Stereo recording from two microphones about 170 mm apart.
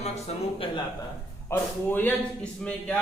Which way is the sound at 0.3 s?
40° left (ahead or behind).